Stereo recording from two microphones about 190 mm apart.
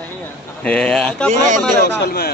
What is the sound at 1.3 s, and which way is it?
Speech, 40° right (ahead or behind).